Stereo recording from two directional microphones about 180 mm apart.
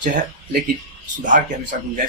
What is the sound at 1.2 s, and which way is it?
Speech, 45° right (ahead or behind).